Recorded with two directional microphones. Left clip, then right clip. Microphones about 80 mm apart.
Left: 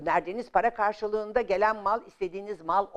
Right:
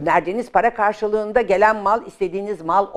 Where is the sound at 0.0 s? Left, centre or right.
Left.